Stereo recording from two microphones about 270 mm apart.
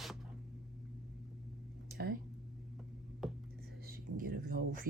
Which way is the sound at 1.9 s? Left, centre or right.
Right.